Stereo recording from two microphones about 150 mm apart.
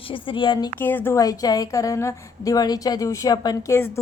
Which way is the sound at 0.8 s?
15° left (ahead or behind).